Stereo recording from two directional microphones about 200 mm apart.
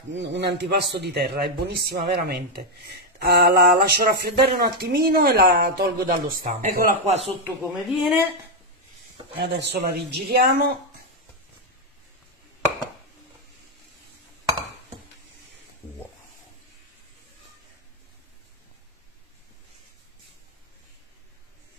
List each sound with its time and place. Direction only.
0.1 s a man's voice: 60° right (ahead or behind); by 7.2 s 40° right (ahead or behind)
7.4 s speech: 10° right (ahead or behind)
9.4 s a man's voice: 60° right (ahead or behind)